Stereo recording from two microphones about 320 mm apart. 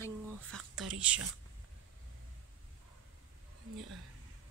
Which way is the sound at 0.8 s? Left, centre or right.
Centre.